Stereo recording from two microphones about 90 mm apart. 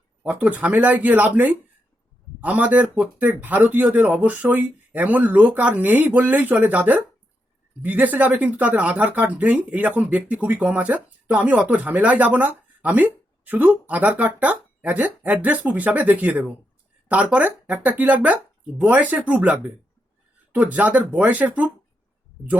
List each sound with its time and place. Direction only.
0.2 s speech: 15° right (ahead or behind)